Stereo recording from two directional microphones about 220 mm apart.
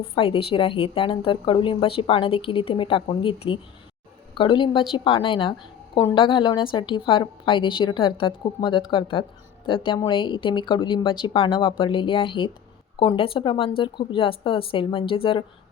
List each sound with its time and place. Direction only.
0.0 s a woman's voice: 25° left (ahead or behind)